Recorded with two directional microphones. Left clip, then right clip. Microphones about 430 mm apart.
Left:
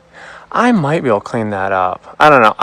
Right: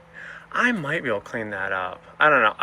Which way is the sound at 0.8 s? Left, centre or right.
Left.